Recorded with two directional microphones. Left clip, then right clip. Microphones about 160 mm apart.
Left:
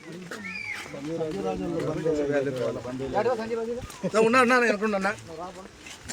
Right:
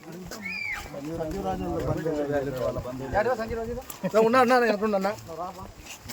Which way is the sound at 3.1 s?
10° right (ahead or behind).